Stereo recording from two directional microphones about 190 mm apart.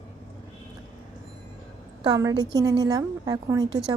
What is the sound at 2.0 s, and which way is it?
Speech, 20° right (ahead or behind).